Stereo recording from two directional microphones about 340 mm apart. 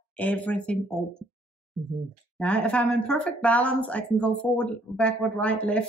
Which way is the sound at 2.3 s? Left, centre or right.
Centre.